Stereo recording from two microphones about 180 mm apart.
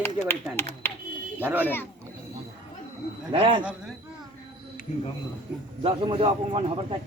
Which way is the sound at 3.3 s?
30° right (ahead or behind).